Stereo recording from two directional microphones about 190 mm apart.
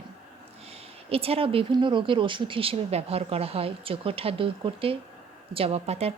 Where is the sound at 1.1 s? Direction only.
30° right (ahead or behind).